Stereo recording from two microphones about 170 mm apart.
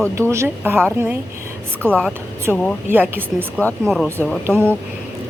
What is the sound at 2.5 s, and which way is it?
Speech, 5° right (ahead or behind).